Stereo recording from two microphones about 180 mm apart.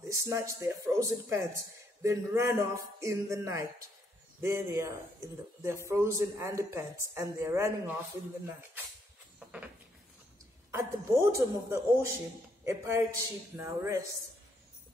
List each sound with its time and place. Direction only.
0.1 s speech: 15° right (ahead or behind)
10.7 s speech: 15° right (ahead or behind)